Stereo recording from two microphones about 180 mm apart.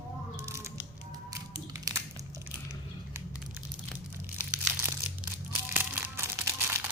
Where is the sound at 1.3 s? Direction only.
20° right (ahead or behind).